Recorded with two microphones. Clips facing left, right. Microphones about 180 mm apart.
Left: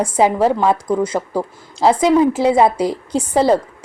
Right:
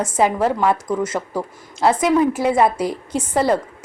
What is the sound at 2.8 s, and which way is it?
Speech, 30° left (ahead or behind).